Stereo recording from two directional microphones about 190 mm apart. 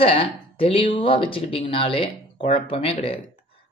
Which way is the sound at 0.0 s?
30° left (ahead or behind).